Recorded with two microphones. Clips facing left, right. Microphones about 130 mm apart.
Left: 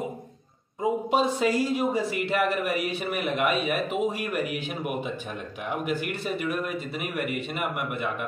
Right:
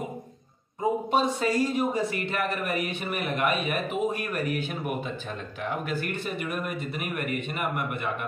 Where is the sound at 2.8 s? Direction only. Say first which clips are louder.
Left 2 dB; 5° left (ahead or behind).